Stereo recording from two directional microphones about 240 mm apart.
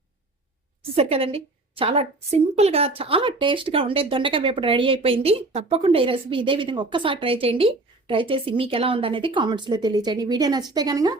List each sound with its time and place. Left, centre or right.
0.9 s a woman's voice: right